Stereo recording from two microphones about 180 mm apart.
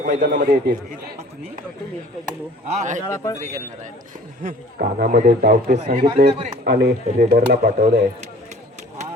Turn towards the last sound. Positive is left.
turn(degrees=-55)  # may be behind; listen again after turning